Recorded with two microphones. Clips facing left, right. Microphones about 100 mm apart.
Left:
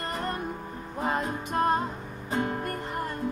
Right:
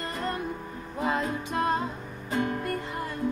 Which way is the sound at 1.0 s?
35° left (ahead or behind).